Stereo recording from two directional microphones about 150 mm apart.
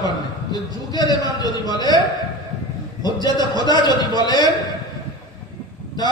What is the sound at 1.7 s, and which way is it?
Speech, 25° left (ahead or behind).